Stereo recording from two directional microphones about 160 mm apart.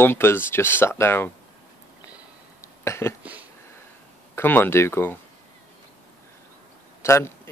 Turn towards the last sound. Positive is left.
turn(degrees=15)  # may be behind; listen again after turning